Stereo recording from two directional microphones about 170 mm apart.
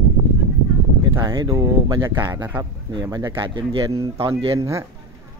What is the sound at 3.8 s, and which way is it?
Speech, 20° right (ahead or behind).